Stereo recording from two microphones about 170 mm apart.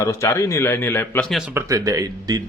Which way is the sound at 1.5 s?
15° right (ahead or behind).